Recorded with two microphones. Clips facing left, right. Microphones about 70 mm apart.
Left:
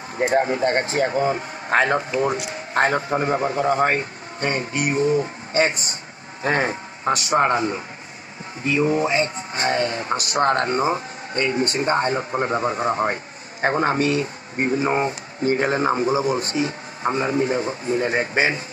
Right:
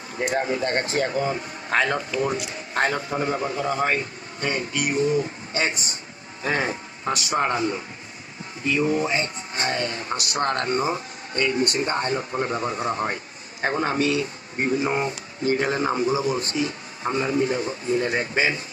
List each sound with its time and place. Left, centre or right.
0.2 s speech: left
17.0 s speech: left